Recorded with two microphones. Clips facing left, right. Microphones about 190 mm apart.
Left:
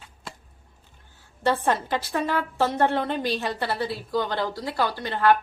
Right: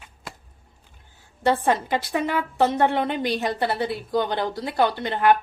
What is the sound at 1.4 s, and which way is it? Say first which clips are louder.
A woman's voice: right 2 dB; 15° right (ahead or behind).